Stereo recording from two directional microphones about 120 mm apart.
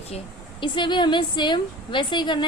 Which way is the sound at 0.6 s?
40° left (ahead or behind).